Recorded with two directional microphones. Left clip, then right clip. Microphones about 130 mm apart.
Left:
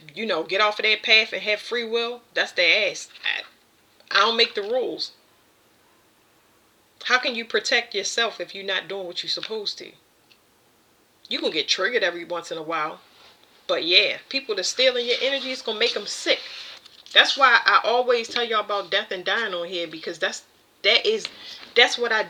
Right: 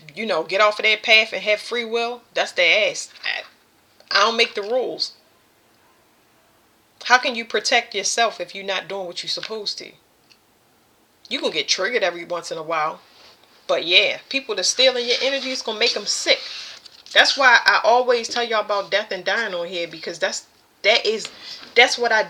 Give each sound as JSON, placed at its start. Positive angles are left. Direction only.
{"t": 0.0, "sound": "speech", "side_deg": 20}
{"t": 4.7, "sound": "speech", "side_deg": 20}
{"t": 7.0, "sound": "speech", "side_deg": 20}
{"t": 11.4, "sound": "a woman's voice", "side_deg": 20}